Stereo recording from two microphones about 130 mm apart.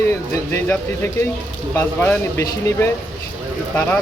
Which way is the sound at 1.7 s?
15° left (ahead or behind).